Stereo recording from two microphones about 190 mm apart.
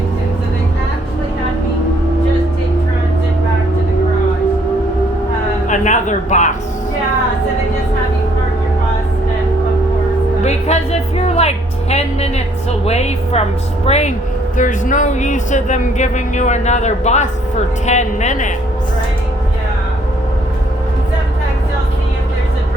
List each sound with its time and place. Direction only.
5.6 s music: 40° left (ahead or behind)
10.4 s music: 35° left (ahead or behind)
12.8 s speech: 35° left (ahead or behind)